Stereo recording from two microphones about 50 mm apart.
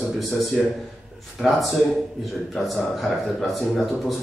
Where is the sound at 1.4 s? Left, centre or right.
Centre.